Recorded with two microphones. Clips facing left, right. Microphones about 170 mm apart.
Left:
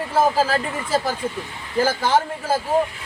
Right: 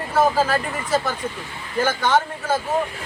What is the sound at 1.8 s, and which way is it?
Speech, 30° left (ahead or behind).